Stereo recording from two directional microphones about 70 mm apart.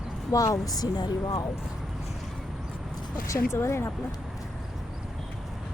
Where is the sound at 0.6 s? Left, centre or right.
Left.